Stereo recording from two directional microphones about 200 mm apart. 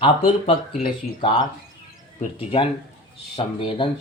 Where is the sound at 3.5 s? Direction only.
25° left (ahead or behind).